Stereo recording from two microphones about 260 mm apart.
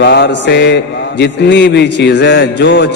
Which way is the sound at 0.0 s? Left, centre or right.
Left.